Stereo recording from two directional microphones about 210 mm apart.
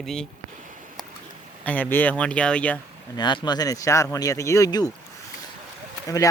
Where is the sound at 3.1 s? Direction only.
20° left (ahead or behind).